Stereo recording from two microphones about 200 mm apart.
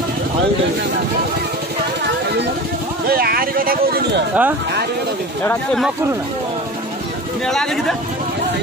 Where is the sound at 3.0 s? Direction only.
50° right (ahead or behind).